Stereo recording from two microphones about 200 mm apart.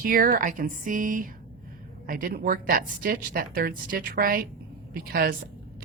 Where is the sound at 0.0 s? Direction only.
45° right (ahead or behind).